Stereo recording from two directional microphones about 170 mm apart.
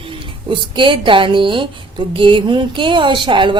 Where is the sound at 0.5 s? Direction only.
30° right (ahead or behind).